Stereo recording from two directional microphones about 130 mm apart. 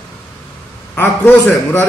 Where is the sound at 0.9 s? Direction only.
15° left (ahead or behind).